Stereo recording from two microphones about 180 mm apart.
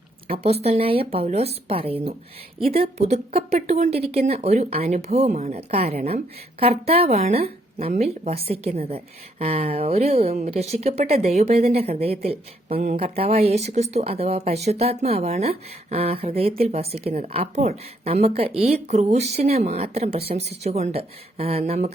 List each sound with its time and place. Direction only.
0.3 s speech: 35° right (ahead or behind)